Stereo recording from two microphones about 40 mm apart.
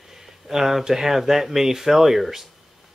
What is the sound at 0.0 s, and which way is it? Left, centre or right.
Speech, centre.